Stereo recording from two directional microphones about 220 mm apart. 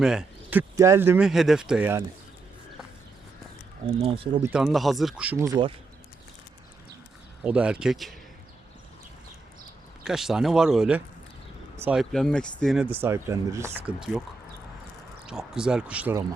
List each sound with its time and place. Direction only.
0.0 s cricket: 5° right (ahead or behind)
0.8 s speech: 10° right (ahead or behind)
3.8 s speech: 25° right (ahead or behind)
4.4 s speech: 5° right (ahead or behind); by 5.7 s 20° right (ahead or behind)
7.4 s speech: 5° right (ahead or behind)
10.0 s speech: centre (ahead or behind)
15.3 s speech: 5° right (ahead or behind)